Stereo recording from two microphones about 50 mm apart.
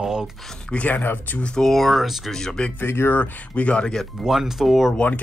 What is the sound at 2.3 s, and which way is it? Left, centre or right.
Speech, centre.